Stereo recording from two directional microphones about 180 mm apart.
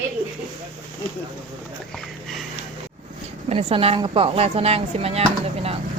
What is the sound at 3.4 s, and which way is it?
A woman's voice, 30° right (ahead or behind).